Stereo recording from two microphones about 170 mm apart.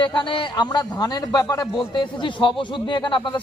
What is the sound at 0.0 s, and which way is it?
Speech, 30° left (ahead or behind).